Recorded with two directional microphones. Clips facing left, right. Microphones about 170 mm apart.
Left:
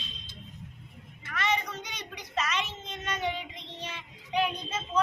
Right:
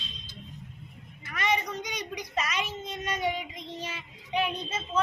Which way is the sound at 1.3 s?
10° right (ahead or behind).